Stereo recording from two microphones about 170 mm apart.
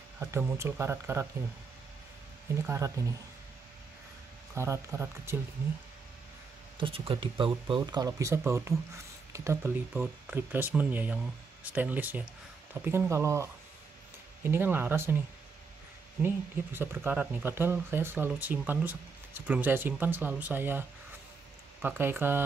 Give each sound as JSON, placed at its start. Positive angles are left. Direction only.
{"t": 0.2, "sound": "speech", "side_deg": -15}
{"t": 2.6, "sound": "speech", "side_deg": -15}
{"t": 4.6, "sound": "speech", "side_deg": -15}
{"t": 6.8, "sound": "speech", "side_deg": -30}
{"t": 16.2, "sound": "speech", "side_deg": -15}
{"t": 21.8, "sound": "speech", "side_deg": -15}